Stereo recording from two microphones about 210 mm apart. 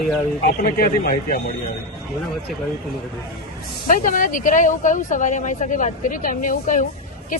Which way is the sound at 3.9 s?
40° left (ahead or behind).